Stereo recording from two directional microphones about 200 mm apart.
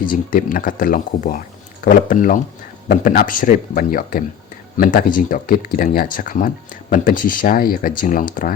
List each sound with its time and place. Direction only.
0.0 s speech: 45° left (ahead or behind)